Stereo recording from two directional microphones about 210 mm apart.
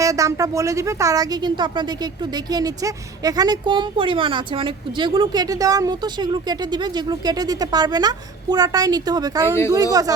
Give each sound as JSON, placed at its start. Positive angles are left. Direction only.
{"t": 0.0, "sound": "a woman's voice", "side_deg": -15}